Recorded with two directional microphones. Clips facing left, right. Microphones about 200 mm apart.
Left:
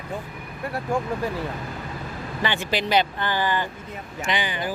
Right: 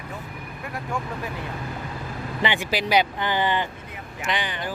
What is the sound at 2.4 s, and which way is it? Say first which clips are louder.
Speech: even; 15° right (ahead or behind).